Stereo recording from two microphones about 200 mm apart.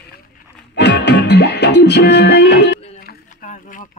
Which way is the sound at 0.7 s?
60° left (ahead or behind).